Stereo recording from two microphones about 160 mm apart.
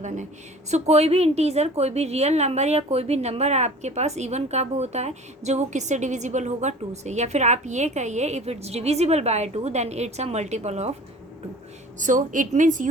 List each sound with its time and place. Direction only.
0.7 s a woman's voice: 40° right (ahead or behind)
11.9 s a woman's voice: 55° right (ahead or behind)